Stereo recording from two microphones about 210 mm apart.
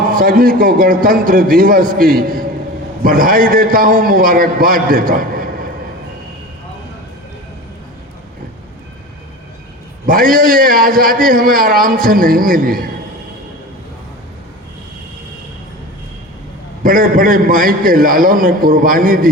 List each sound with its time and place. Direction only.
0.1 s a man's voice: 45° right (ahead or behind)
10.1 s a man's voice: 45° right (ahead or behind)
16.8 s a man's voice: 40° right (ahead or behind)